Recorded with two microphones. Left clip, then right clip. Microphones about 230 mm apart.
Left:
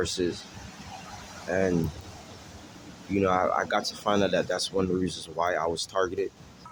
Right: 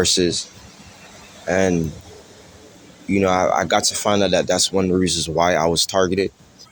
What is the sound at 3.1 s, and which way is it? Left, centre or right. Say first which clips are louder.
Speech: right 7 dB; right.